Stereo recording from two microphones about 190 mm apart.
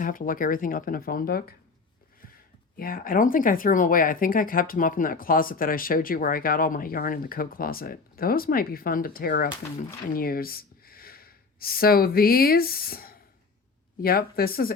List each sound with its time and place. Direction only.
0.0 s speech: 45° left (ahead or behind)
2.7 s speech: 50° left (ahead or behind)